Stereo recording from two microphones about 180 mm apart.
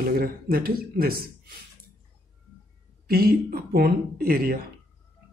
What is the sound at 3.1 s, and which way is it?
A woman's voice, 55° right (ahead or behind).